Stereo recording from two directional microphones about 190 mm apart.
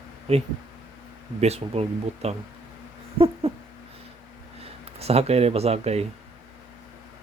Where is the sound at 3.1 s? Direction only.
30° right (ahead or behind).